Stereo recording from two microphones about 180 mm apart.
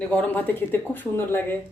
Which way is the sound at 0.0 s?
5° left (ahead or behind).